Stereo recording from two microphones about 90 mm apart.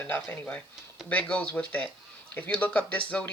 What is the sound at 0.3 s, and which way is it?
Speech, 20° left (ahead or behind).